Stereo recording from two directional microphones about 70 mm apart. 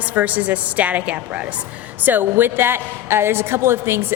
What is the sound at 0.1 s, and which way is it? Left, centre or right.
A woman's voice, right.